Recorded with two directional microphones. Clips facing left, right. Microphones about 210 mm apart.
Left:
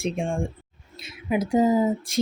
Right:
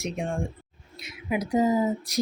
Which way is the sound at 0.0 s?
30° left (ahead or behind).